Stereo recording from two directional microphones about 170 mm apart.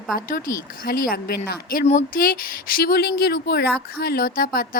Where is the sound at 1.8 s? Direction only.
50° left (ahead or behind).